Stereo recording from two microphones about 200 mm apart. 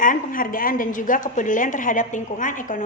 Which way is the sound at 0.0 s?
40° left (ahead or behind).